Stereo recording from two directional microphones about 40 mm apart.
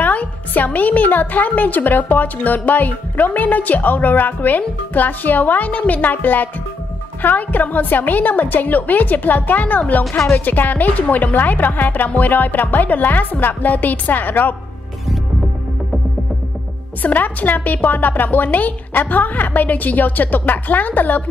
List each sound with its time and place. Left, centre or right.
0.0 s a woman's voice: left
17.0 s a woman's voice: left